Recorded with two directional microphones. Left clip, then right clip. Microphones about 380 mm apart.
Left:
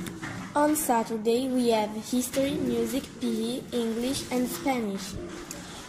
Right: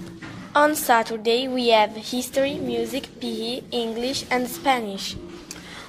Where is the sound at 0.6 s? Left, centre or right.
Right.